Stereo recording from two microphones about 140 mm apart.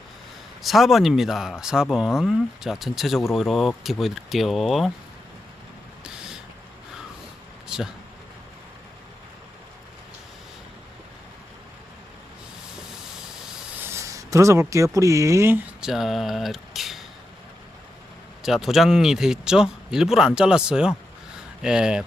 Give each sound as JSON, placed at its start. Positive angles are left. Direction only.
{"t": 0.6, "sound": "speech", "side_deg": 0}
{"t": 6.0, "sound": "a sound", "side_deg": -5}
{"t": 13.7, "sound": "speech", "side_deg": -20}
{"t": 18.4, "sound": "speech", "side_deg": 0}